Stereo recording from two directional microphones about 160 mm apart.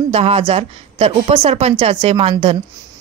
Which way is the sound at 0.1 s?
40° right (ahead or behind).